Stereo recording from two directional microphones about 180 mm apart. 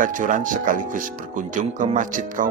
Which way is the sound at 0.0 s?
45° right (ahead or behind).